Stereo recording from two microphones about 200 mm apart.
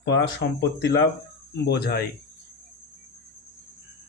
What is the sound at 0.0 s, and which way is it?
Speech, 55° left (ahead or behind).